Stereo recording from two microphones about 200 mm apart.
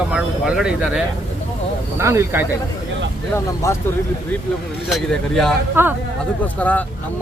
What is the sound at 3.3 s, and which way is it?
Speech, 15° left (ahead or behind).